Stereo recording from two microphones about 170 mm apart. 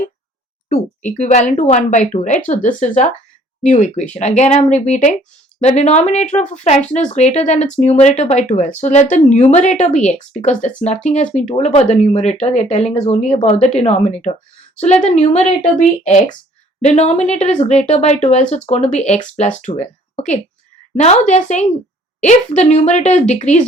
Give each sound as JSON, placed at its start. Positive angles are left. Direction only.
{"t": 1.2, "sound": "speech", "side_deg": 45}